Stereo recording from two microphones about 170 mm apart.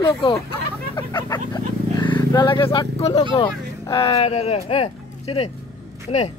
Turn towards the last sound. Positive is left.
turn(degrees=40)  # may be behind; listen again after turning